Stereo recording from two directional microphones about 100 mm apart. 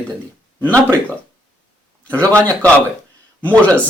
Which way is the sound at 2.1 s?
10° left (ahead or behind).